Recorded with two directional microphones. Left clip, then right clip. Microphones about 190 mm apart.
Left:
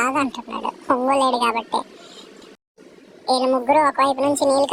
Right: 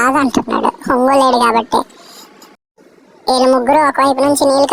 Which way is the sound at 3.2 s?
50° right (ahead or behind).